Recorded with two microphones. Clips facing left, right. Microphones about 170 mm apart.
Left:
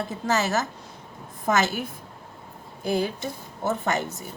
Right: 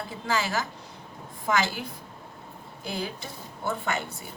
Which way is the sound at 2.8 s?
50° left (ahead or behind).